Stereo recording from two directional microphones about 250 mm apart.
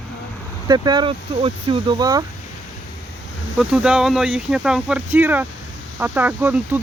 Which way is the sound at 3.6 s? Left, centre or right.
Centre.